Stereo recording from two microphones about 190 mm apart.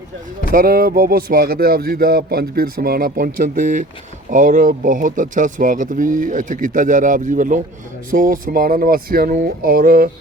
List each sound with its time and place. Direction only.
0.5 s speech: 50° right (ahead or behind)